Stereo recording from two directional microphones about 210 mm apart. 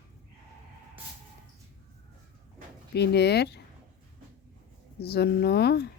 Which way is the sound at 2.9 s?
50° left (ahead or behind).